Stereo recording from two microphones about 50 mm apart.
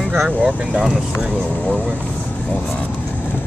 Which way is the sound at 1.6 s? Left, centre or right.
Left.